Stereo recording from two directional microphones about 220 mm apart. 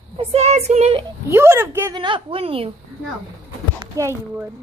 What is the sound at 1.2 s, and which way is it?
A woman's voice, 10° right (ahead or behind).